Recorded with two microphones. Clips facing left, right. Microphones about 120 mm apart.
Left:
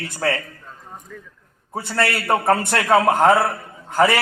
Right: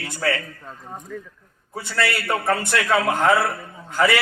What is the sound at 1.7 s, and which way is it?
A man's voice, 45° left (ahead or behind).